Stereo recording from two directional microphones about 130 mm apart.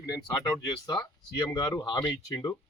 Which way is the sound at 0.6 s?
30° left (ahead or behind).